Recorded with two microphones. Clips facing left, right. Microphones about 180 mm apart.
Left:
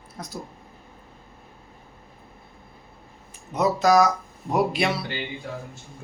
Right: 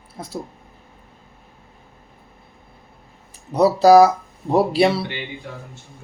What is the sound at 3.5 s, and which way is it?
Speech, 35° right (ahead or behind).